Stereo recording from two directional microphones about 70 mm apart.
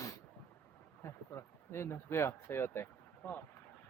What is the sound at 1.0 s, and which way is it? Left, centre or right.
Speech, left.